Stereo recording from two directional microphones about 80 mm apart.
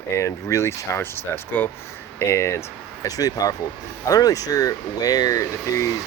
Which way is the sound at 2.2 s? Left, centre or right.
Left.